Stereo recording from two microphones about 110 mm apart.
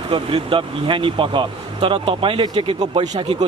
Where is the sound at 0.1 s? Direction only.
50° right (ahead or behind).